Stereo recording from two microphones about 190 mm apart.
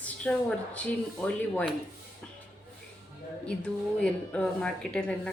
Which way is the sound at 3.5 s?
5° left (ahead or behind).